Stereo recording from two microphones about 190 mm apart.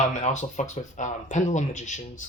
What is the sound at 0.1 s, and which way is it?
Speech, 40° left (ahead or behind).